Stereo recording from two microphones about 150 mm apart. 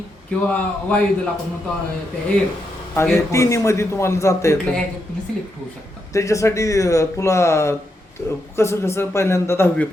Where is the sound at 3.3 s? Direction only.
20° left (ahead or behind).